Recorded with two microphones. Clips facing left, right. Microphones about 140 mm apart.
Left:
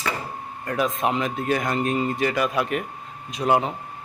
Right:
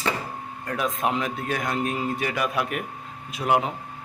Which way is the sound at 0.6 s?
Centre (ahead or behind).